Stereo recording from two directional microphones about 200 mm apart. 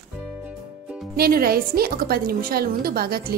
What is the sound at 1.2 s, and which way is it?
A woman's voice, 50° right (ahead or behind).